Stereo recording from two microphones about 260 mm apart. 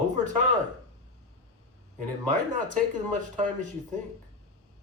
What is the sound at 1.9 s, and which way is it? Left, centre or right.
Speech, right.